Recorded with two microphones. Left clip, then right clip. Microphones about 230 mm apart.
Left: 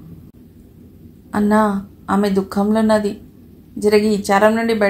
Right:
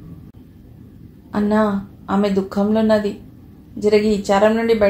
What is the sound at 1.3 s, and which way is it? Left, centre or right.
A woman's voice, left.